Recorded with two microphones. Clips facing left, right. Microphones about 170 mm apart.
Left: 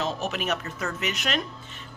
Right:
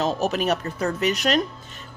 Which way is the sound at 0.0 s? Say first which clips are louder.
Right 6 dB; 40° right (ahead or behind).